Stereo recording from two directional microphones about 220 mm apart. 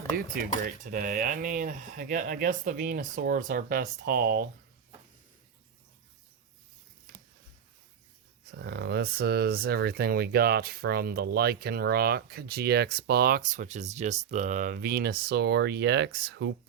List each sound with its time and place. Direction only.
0.1 s speech: 40° right (ahead or behind)
8.5 s speech: 50° right (ahead or behind)